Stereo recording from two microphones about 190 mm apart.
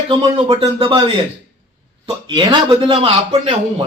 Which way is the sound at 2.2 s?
25° right (ahead or behind).